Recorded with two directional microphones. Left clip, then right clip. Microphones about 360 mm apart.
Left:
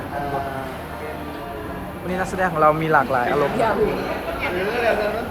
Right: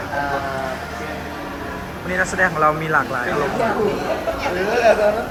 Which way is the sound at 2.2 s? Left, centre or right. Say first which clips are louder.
Right 2 dB; centre.